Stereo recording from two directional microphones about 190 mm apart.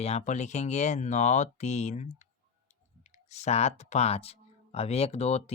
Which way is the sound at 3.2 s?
35° left (ahead or behind).